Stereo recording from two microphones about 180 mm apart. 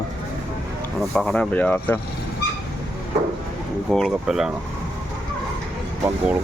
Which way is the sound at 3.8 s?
Centre (ahead or behind).